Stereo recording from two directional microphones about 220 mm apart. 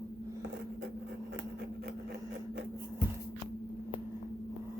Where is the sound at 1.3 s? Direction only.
50° right (ahead or behind).